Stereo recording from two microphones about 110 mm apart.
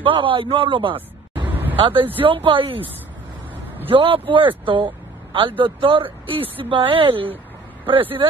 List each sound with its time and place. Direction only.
0.0 s speech: 50° right (ahead or behind)
3.9 s speech: 55° right (ahead or behind)